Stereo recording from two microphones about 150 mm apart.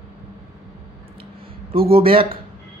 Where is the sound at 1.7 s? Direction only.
40° right (ahead or behind).